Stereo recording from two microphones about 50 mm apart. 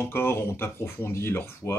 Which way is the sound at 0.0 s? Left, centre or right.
Left.